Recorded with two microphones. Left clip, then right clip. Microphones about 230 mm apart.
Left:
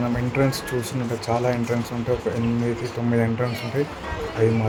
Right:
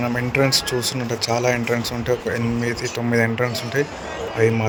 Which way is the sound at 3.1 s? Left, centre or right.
Right.